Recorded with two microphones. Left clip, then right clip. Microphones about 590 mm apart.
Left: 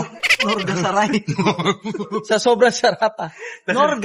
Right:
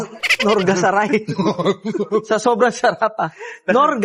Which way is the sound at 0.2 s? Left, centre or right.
Centre.